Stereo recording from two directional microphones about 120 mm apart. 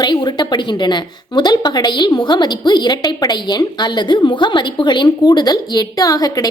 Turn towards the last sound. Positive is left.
turn(degrees=30)  # may be behind; listen again after turning